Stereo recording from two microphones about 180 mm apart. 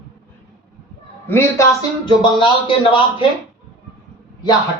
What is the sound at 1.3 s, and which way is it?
Speech, 15° left (ahead or behind).